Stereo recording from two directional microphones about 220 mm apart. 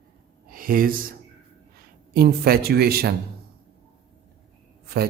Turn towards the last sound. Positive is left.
turn(degrees=-45)  # may be behind; listen again after turning